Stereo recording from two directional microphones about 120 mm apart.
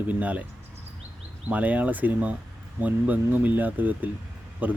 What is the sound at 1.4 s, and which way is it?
Speech, 10° right (ahead or behind).